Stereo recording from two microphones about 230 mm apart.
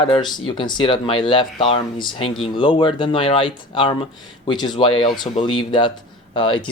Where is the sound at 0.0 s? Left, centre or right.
Centre.